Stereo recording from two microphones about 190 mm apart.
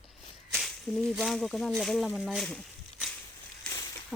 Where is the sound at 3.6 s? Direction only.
15° left (ahead or behind).